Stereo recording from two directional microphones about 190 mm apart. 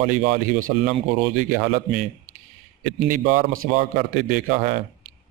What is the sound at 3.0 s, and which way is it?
Speech, 45° right (ahead or behind).